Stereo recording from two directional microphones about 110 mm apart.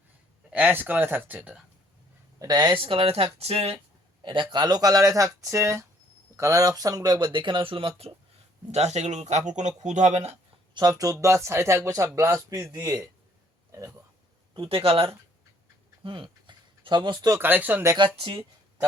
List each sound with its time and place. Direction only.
0.5 s speech: 15° right (ahead or behind)
2.4 s speech: 40° right (ahead or behind)
2.8 s speech: 60° right (ahead or behind)
4.2 s speech: 45° right (ahead or behind); by 8.1 s 60° right (ahead or behind)
8.7 s speech: 90° right
10.8 s speech: 35° right (ahead or behind)
13.7 s a sound: 30° right (ahead or behind)
14.7 s speech: 60° right (ahead or behind)
16.0 s a sound: 50° right (ahead or behind)
17.3 s speech: 20° right (ahead or behind)
17.9 s speech: 50° right (ahead or behind)